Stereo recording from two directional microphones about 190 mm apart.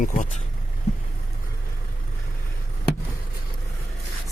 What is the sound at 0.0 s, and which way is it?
Speech, 45° left (ahead or behind).